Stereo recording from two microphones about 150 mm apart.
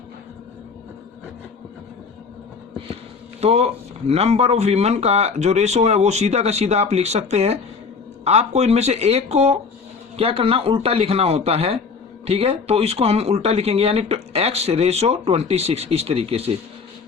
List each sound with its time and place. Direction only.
3.4 s speech: 45° right (ahead or behind)